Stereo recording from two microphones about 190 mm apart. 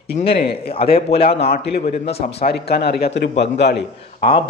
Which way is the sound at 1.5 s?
55° left (ahead or behind).